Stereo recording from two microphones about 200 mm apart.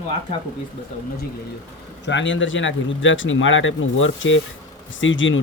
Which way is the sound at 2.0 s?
65° left (ahead or behind).